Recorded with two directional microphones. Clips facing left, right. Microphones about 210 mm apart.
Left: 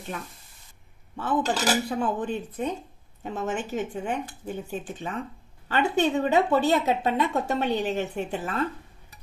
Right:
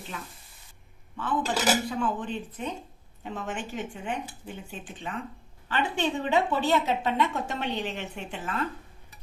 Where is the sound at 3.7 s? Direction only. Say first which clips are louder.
Left 5 dB; 45° left (ahead or behind).